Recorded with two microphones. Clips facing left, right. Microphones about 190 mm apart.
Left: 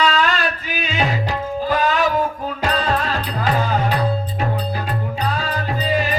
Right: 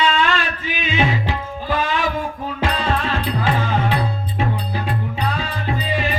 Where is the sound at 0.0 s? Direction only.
40° left (ahead or behind).